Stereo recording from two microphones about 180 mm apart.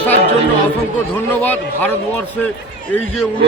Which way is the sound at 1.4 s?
10° left (ahead or behind).